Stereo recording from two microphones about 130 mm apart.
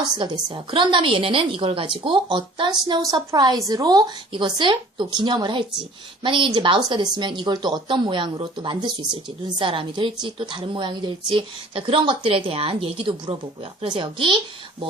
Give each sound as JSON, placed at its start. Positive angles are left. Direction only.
{"t": 0.2, "sound": "a woman's voice", "side_deg": -35}